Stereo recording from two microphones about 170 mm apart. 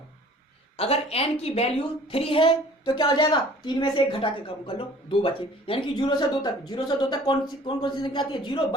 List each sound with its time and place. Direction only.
0.8 s a woman's voice: 35° left (ahead or behind)